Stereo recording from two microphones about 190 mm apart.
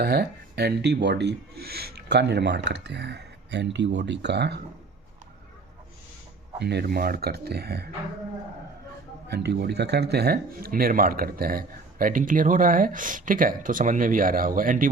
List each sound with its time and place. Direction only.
0.0 s speech: 55° right (ahead or behind)
6.6 s speech: 60° right (ahead or behind)
9.3 s speech: 60° right (ahead or behind)